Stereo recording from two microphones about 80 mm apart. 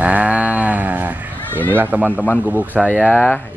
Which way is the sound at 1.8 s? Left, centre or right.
Right.